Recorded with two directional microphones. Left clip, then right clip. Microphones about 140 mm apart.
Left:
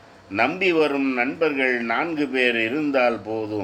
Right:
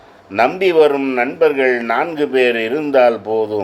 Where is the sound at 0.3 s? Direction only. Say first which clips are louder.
Right 7 dB; 35° right (ahead or behind).